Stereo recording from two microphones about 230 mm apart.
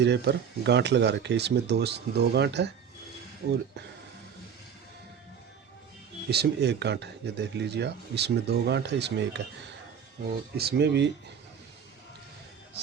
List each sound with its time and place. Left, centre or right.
0.0 s speech: right
6.3 s speech: right
10.6 s speech: right